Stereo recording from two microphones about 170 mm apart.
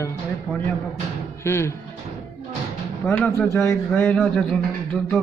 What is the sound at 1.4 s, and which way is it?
Speech, 15° left (ahead or behind).